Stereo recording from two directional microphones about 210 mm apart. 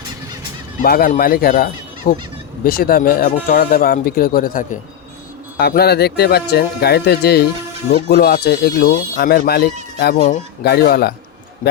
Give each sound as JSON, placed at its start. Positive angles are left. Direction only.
{"t": 0.8, "sound": "speech", "side_deg": 45}
{"t": 10.2, "sound": "speech", "side_deg": 35}
{"t": 10.6, "sound": "speech", "side_deg": 50}